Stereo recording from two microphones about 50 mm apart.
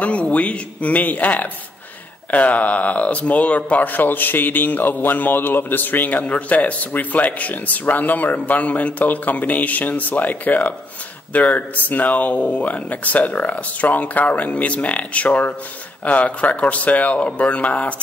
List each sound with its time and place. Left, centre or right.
0.0 s speech: left
6.2 s speech: left